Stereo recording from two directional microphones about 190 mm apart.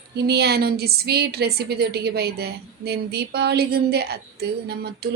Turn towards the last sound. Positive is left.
turn(degrees=-60)  # may be behind; listen again after turning